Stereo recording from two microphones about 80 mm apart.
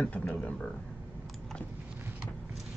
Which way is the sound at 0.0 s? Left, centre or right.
Centre.